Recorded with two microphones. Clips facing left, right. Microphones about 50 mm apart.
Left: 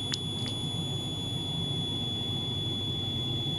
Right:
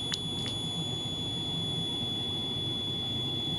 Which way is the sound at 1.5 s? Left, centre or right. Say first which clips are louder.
Even; centre.